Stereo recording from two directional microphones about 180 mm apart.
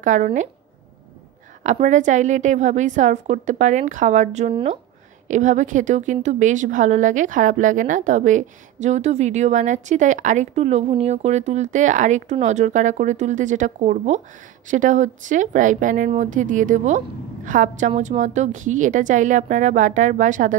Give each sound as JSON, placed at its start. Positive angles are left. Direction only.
{"t": 0.0, "sound": "a woman's voice", "side_deg": -45}
{"t": 1.6, "sound": "a woman's voice", "side_deg": -45}